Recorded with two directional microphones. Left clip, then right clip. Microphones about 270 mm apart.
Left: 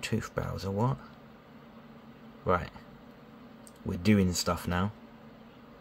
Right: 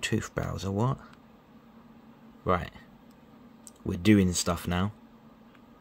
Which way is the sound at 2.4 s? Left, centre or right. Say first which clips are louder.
Right 1 dB; centre.